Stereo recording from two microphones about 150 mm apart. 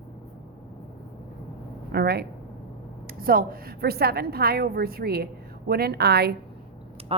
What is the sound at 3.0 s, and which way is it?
A woman's voice, 75° right (ahead or behind).